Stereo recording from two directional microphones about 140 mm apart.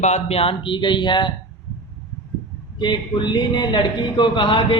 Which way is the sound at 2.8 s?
35° left (ahead or behind).